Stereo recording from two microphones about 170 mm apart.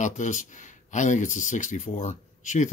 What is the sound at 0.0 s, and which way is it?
Speech, 45° left (ahead or behind).